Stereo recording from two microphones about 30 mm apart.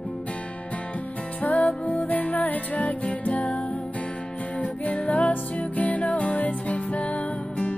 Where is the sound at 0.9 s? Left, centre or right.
Left.